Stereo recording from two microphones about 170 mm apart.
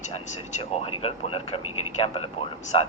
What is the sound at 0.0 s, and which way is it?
Speech, 40° left (ahead or behind).